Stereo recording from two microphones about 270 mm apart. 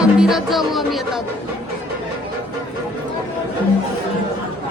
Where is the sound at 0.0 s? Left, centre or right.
Centre.